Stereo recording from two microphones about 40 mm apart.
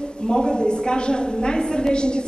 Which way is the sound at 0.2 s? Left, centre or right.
Left.